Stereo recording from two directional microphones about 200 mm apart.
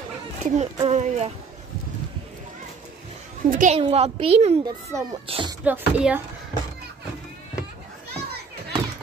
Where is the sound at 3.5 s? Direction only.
40° right (ahead or behind).